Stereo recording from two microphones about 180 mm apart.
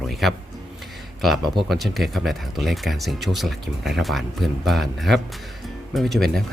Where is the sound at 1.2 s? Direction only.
Centre (ahead or behind).